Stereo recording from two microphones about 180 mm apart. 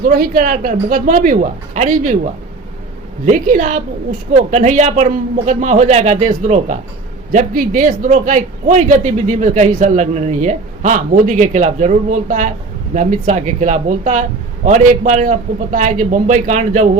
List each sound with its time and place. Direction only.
0.0 s a man's voice: 55° right (ahead or behind)
3.2 s a man's voice: 50° right (ahead or behind)